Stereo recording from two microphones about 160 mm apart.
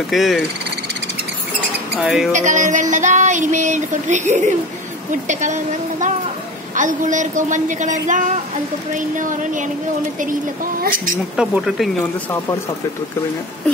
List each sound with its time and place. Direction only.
0.1 s speech: centre (ahead or behind)
2.0 s speech: 5° right (ahead or behind)
2.3 s a sound: 50° right (ahead or behind)
10.8 s speech: 60° right (ahead or behind)
11.3 s speech: 5° right (ahead or behind)